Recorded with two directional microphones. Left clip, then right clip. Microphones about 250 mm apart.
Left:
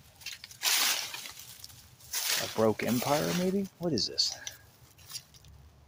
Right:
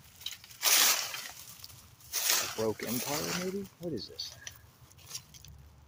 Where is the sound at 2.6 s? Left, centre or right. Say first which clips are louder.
Left 6 dB; left.